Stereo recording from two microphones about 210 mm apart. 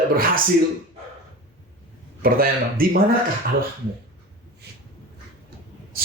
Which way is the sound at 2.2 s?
45° right (ahead or behind).